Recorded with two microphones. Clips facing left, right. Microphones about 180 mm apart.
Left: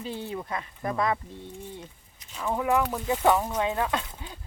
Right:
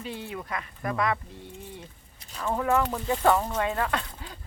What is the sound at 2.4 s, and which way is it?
Speech, 15° left (ahead or behind).